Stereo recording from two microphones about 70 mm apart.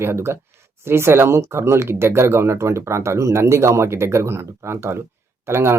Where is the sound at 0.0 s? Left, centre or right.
Right.